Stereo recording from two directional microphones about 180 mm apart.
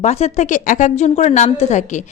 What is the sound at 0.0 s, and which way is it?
A woman's voice, 40° left (ahead or behind).